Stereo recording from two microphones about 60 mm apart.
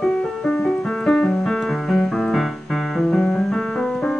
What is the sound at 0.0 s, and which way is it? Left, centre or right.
Music, centre.